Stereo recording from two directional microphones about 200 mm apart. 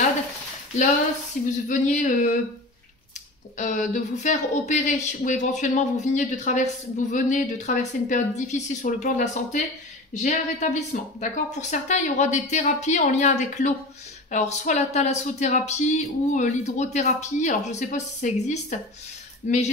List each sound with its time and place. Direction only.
1.4 s speech: 40° left (ahead or behind)
3.5 s speech: 40° left (ahead or behind)